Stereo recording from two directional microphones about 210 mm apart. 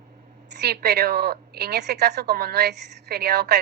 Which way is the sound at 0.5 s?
50° right (ahead or behind).